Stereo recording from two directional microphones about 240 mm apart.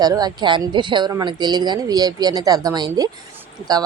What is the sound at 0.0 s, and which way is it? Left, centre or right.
Speech, centre.